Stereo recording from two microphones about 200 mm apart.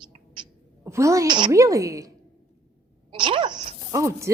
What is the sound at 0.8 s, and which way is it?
A woman's voice, 15° right (ahead or behind).